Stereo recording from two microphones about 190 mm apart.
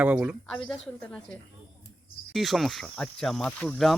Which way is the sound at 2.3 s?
Centre (ahead or behind).